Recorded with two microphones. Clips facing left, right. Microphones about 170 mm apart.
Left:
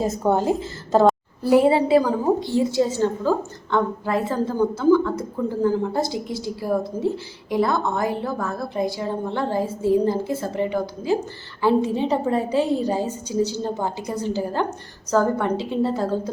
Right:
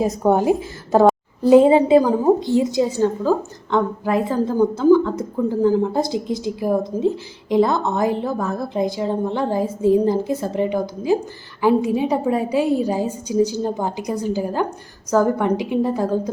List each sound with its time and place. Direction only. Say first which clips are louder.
0.0 s a woman's voice: right 3 dB; 15° right (ahead or behind)